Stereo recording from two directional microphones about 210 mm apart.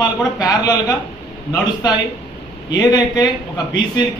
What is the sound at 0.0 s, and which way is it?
A man's voice, 20° left (ahead or behind).